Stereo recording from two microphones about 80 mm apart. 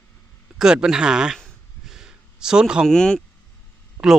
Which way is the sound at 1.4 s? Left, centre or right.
Centre.